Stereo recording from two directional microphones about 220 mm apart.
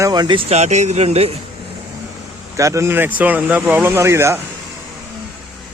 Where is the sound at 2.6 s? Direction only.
15° right (ahead or behind).